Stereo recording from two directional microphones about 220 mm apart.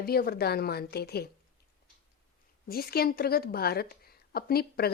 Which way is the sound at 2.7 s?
45° left (ahead or behind).